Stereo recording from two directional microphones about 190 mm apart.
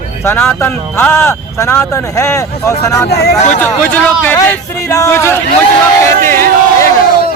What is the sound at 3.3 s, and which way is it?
Speech, 40° left (ahead or behind).